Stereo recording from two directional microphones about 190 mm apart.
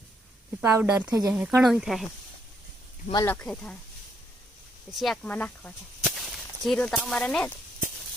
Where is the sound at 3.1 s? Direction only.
10° left (ahead or behind).